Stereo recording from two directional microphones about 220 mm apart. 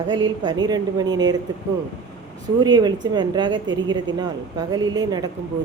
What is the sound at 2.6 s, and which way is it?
A woman's voice, 20° right (ahead or behind).